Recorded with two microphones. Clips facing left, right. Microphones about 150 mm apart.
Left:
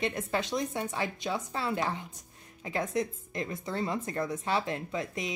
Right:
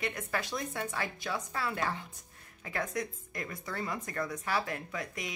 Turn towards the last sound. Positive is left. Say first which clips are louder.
# left 5 dB
turn(degrees=25)  # may be behind; listen again after turning